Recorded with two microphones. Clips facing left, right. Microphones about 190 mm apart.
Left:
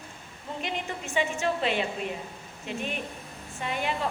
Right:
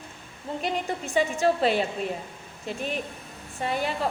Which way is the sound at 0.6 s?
35° right (ahead or behind).